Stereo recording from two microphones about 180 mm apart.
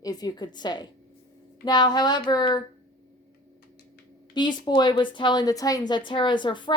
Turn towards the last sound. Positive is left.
turn(degrees=25)  # may be behind; listen again after turning